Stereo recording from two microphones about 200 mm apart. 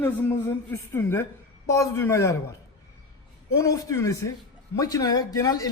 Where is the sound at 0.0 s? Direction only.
10° left (ahead or behind).